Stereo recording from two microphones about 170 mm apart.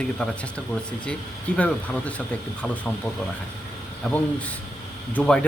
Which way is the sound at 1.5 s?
5° left (ahead or behind).